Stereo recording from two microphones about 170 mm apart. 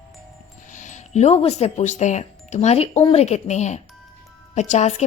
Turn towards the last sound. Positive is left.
turn(degrees=40)  # may be behind; listen again after turning